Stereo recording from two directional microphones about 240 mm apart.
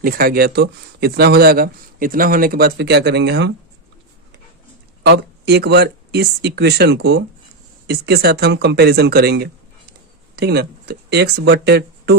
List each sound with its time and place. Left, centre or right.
0.0 s speech: right
5.0 s speech: right